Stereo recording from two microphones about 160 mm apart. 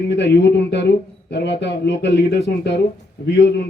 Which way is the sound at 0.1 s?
90° left.